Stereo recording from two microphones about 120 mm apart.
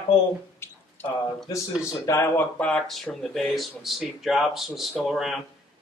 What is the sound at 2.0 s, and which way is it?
Speech, 20° left (ahead or behind).